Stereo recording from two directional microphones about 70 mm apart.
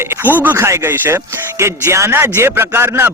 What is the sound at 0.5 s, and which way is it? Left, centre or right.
Speech, right.